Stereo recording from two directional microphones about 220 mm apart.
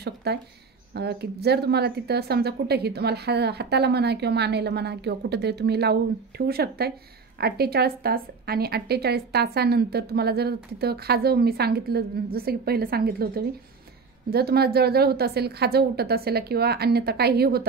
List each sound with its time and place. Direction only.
0.0 s speech: 45° right (ahead or behind)